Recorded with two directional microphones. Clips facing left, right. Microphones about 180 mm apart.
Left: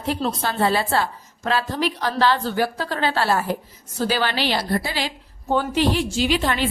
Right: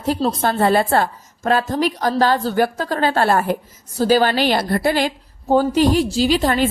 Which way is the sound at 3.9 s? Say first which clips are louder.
Right 7 dB; 40° right (ahead or behind).